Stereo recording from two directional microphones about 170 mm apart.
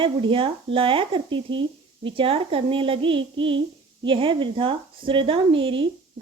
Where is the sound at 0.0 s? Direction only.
30° right (ahead or behind).